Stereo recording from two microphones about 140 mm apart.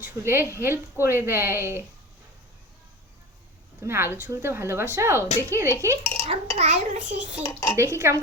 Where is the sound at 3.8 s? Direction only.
15° right (ahead or behind).